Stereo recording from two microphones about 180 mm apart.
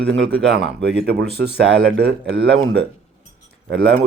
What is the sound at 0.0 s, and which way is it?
Speech, 75° right (ahead or behind).